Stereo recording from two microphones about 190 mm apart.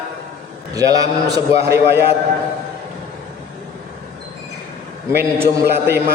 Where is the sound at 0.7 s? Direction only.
20° right (ahead or behind).